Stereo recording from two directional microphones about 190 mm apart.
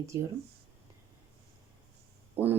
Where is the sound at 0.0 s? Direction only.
15° right (ahead or behind).